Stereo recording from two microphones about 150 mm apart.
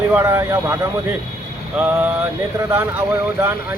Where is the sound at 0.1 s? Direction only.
15° right (ahead or behind).